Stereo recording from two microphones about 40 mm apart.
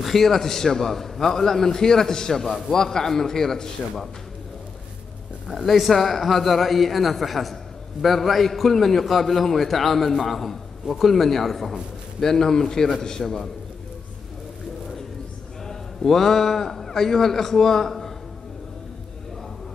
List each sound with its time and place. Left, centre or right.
0.0 s a man's voice: centre
5.7 s a man's voice: centre
15.6 s a man's voice: centre